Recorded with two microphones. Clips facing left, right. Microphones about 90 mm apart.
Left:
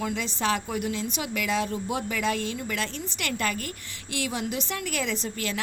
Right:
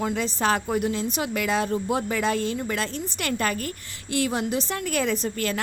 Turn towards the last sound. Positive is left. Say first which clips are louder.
# right 5 dB
turn(degrees=-45)  # may be behind; listen again after turning